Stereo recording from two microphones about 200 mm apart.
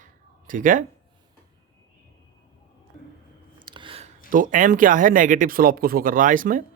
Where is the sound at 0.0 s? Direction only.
40° right (ahead or behind).